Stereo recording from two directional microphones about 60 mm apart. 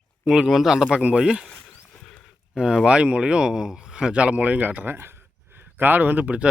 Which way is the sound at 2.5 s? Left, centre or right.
Centre.